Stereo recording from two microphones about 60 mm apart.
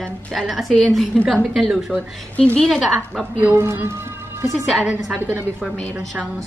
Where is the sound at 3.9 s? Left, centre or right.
Right.